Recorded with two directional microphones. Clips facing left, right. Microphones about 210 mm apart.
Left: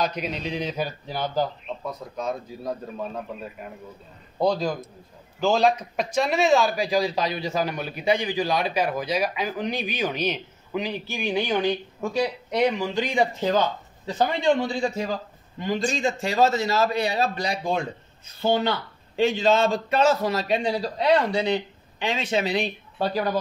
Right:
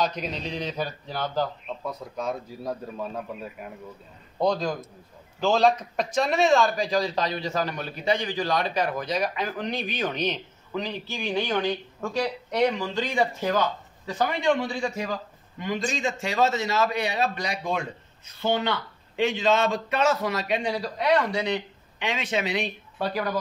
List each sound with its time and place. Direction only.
0.0 s speech: 5° left (ahead or behind)
1.9 s a man's voice: 10° right (ahead or behind); by 23.3 s 30° left (ahead or behind)